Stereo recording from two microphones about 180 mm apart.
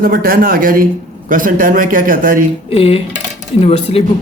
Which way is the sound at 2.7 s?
30° left (ahead or behind).